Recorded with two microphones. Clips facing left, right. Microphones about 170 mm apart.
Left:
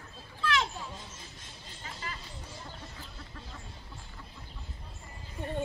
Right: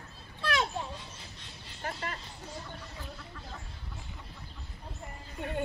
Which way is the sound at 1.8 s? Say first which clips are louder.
Right 6 dB; 60° right (ahead or behind).